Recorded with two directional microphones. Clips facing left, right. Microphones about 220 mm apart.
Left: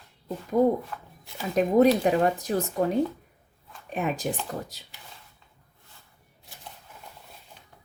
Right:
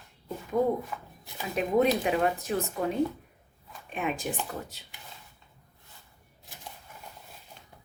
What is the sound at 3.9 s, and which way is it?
Speech, 40° left (ahead or behind).